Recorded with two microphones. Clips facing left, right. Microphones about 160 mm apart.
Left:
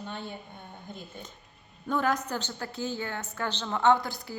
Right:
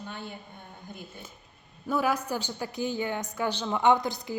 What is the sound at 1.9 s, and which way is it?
A woman's voice, 10° right (ahead or behind).